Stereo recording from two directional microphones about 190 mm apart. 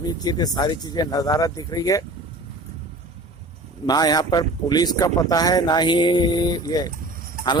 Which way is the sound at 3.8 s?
20° left (ahead or behind).